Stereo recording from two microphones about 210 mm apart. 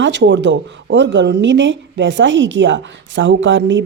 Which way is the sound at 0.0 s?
55° right (ahead or behind).